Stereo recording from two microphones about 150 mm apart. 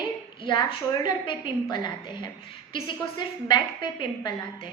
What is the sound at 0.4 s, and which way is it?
Speech, 35° left (ahead or behind).